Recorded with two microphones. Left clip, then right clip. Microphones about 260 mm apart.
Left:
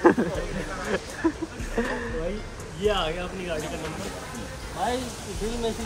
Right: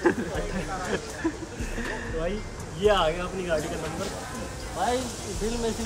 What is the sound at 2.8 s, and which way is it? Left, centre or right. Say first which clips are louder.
Speech: right 3 dB; right.